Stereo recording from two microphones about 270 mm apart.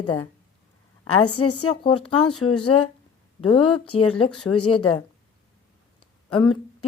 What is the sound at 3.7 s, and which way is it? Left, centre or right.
Speech, left.